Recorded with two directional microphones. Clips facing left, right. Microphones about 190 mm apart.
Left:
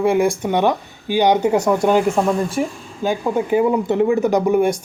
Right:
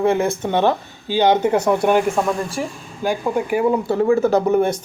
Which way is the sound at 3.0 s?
20° left (ahead or behind).